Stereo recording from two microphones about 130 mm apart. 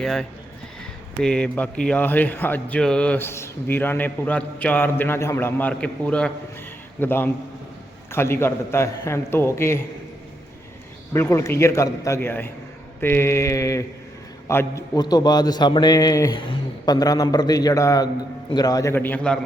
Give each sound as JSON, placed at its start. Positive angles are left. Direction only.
{"t": 0.0, "sound": "a man's voice", "side_deg": 5}
{"t": 11.1, "sound": "a man's voice", "side_deg": 20}
{"t": 14.9, "sound": "a man's voice", "side_deg": 35}
{"t": 16.4, "sound": "a man's voice", "side_deg": 35}
{"t": 18.9, "sound": "speech", "side_deg": 15}